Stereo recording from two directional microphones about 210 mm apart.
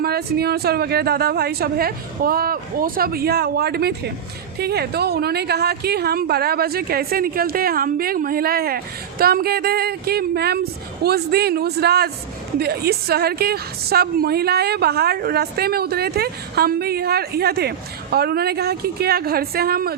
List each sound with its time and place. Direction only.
0.0 s a woman's voice: 50° right (ahead or behind)